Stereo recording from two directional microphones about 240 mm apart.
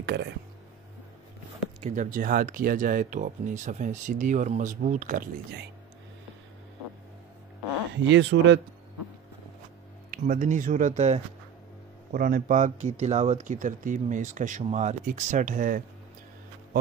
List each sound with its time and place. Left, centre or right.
0.0 s speech: right
1.8 s speech: right
7.9 s speech: right
10.1 s speech: right